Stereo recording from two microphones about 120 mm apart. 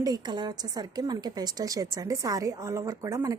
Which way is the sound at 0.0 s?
35° right (ahead or behind).